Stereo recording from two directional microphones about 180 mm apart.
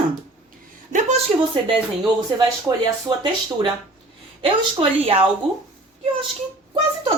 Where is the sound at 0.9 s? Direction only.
40° right (ahead or behind).